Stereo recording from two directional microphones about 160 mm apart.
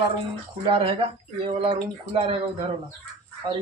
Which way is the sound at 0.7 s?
35° right (ahead or behind).